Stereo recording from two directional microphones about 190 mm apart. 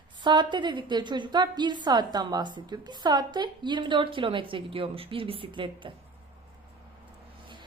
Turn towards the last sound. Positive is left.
turn(degrees=-25)  # may be behind; listen again after turning